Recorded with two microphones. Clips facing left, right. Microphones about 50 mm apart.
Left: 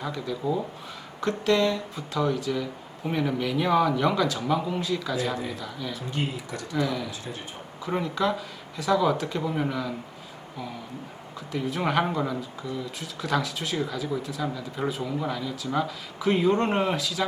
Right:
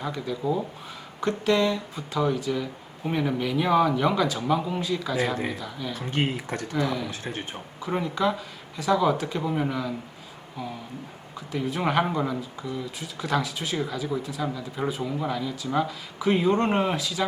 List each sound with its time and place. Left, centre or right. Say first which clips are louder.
0.0 s speech: right 1 dB; centre
5.9 s speech: right 5 dB; right
7.8 s speech: even; centre
11.3 s speech: right 1 dB; centre